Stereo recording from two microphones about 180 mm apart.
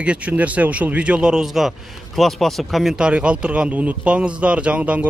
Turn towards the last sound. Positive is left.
turn(degrees=-5)  # may be behind; listen again after turning